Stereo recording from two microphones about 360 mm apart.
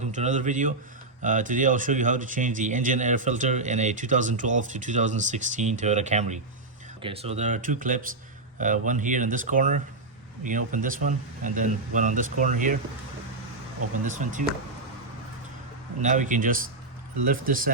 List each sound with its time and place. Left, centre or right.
0.0 s a man's voice: centre
14.0 s a man's voice: right
16.0 s a man's voice: right